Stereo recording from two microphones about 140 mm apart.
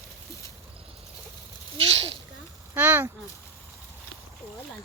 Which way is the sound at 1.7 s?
45° right (ahead or behind).